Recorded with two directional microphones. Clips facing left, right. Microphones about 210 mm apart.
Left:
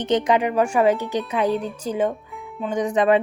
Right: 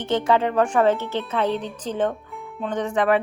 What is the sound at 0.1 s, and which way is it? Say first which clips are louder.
A woman's voice: left 1 dB; 15° left (ahead or behind).